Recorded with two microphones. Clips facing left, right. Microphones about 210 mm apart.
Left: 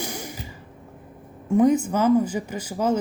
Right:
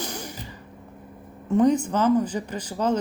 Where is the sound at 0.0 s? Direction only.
10° left (ahead or behind).